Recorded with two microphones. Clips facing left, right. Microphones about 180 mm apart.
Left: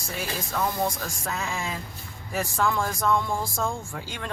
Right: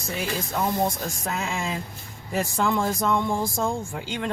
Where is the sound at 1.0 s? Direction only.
20° right (ahead or behind).